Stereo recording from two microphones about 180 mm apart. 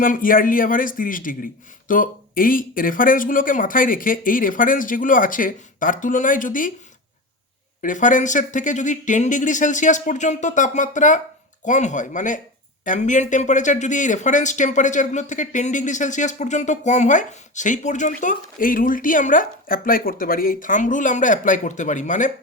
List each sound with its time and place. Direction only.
0.0 s speech: 50° left (ahead or behind)
7.8 s speech: 45° left (ahead or behind)